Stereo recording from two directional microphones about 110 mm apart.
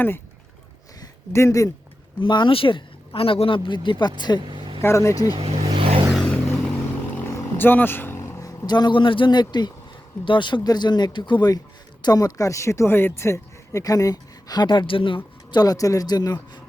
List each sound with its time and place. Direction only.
1.3 s speech: 25° left (ahead or behind)
2.2 s speech: 45° left (ahead or behind)
4.4 s vehicle: 45° right (ahead or behind)
4.8 s speech: 25° left (ahead or behind)
5.4 s vehicle: 60° right (ahead or behind)
6.1 s vehicle: 10° left (ahead or behind)
7.3 s vehicle: 25° left (ahead or behind)
8.4 s speech: 35° left (ahead or behind)
15.6 s speech: 35° left (ahead or behind)